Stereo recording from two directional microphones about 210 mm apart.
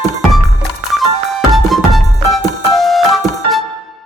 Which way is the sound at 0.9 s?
Centre (ahead or behind).